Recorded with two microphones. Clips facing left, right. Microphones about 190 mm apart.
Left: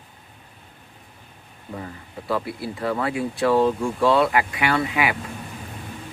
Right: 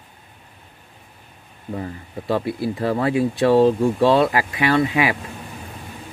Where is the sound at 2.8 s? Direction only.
30° right (ahead or behind).